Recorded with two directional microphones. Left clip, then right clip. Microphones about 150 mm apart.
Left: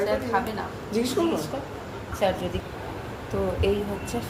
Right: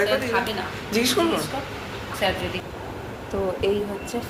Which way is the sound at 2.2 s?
55° left (ahead or behind).